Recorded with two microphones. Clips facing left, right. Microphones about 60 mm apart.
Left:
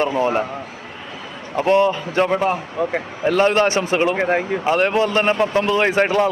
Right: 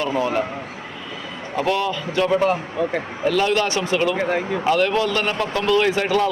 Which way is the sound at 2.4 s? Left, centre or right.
Centre.